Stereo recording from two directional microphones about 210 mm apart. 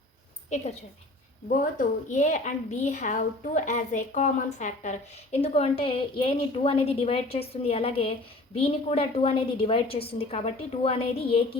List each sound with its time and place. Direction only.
0.5 s a woman's voice: 30° left (ahead or behind)